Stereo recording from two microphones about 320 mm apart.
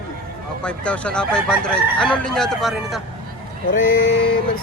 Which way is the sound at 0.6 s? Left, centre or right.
Centre.